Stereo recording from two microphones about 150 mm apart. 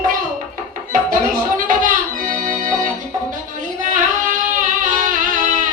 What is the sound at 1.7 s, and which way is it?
Music, 60° right (ahead or behind).